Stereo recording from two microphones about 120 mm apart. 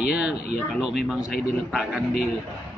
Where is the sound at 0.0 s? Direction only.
5° right (ahead or behind).